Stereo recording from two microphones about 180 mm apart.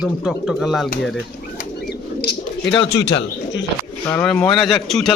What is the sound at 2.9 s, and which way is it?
Speech, 75° left (ahead or behind).